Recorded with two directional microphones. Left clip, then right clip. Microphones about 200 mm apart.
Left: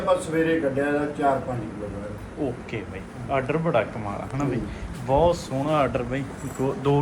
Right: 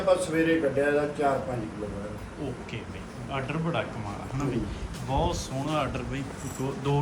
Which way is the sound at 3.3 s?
10° right (ahead or behind).